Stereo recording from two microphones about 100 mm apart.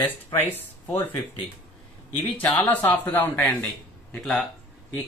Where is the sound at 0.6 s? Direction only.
20° left (ahead or behind).